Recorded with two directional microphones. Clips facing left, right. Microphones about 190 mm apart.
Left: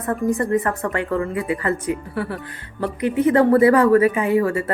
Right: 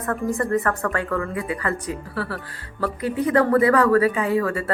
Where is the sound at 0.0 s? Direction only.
20° left (ahead or behind).